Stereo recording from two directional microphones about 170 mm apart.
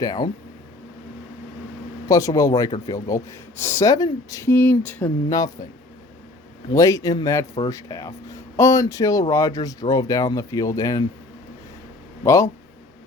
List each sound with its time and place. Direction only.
0.0 s speech: 25° left (ahead or behind)
2.0 s speech: 20° left (ahead or behind)
6.7 s speech: 20° left (ahead or behind)
12.2 s speech: 15° left (ahead or behind)